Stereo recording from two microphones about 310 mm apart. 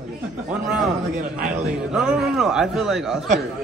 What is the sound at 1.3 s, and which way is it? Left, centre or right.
Speech, right.